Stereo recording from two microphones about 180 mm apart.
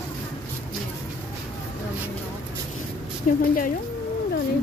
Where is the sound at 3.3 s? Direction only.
45° left (ahead or behind).